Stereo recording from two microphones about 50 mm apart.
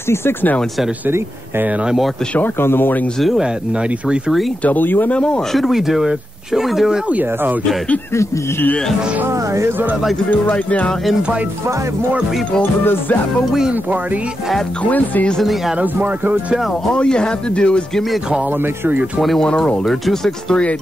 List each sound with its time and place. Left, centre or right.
0.1 s speech: left
2.6 s speech: left
4.6 s speech: left
5.1 s speech: centre
5.5 s speech: centre
7.1 s speech: right
9.3 s speech: right
10.5 s speech: left
14.8 s speech: left
15.8 s speech: right
16.9 s speech: centre
19.4 s speech: centre
19.8 s speech: centre